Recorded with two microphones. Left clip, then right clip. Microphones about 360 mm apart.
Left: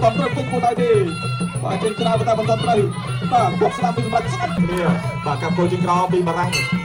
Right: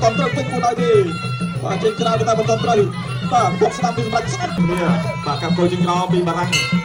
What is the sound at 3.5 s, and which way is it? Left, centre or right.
Music, left.